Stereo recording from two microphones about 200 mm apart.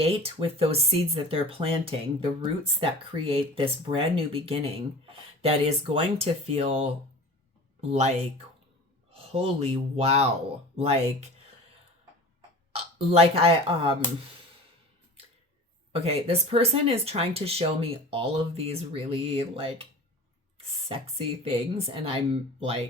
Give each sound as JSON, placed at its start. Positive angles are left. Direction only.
{"t": 0.0, "sound": "speech", "side_deg": -30}
{"t": 13.1, "sound": "speech", "side_deg": -30}
{"t": 15.9, "sound": "speech", "side_deg": -30}